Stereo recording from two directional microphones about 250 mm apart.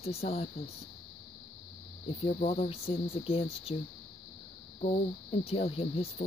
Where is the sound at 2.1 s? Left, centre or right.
Left.